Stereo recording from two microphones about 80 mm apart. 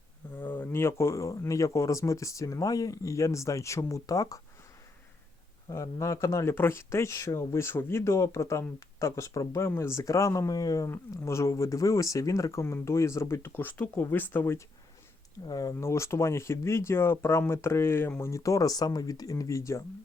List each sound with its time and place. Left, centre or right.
0.3 s speech: left
5.7 s speech: left
10.9 s speech: left
15.4 s speech: left
15.8 s speech: left
18.2 s speech: left